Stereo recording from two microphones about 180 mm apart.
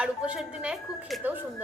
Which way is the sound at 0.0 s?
5° right (ahead or behind).